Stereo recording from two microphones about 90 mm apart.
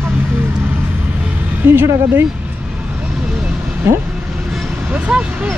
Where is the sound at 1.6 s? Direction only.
25° right (ahead or behind).